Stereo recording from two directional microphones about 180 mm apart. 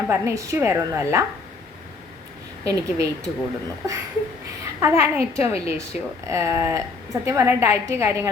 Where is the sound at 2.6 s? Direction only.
20° right (ahead or behind).